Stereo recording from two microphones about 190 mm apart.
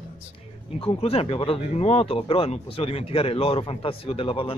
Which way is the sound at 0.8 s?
30° left (ahead or behind).